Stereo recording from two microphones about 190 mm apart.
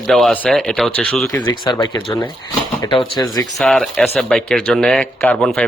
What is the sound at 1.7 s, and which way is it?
Speech, 20° left (ahead or behind).